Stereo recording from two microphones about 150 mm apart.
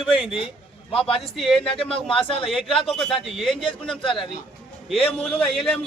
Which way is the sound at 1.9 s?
35° left (ahead or behind).